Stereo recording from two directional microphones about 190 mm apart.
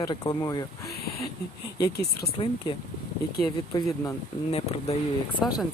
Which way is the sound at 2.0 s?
55° left (ahead or behind).